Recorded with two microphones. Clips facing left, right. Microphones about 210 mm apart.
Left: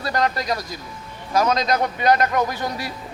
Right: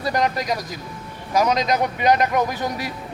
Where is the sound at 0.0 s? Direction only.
15° right (ahead or behind).